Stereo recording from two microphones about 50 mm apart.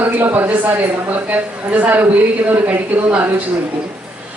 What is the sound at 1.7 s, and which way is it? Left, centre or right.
Speech, right.